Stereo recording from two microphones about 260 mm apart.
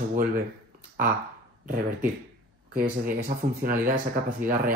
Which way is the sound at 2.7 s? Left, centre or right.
Right.